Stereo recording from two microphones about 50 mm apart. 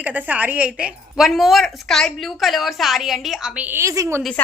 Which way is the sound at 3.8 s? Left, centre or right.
Right.